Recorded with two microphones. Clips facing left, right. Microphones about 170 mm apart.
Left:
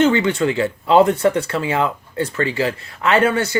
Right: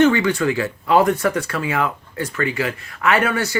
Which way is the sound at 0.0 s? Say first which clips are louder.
Even; 25° left (ahead or behind).